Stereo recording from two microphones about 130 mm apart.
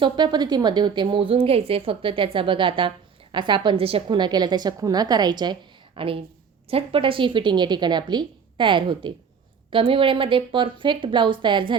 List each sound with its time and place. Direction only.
0.0 s a woman's voice: 35° right (ahead or behind)